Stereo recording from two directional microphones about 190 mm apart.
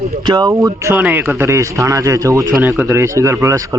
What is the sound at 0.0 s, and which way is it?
Speech, 30° right (ahead or behind).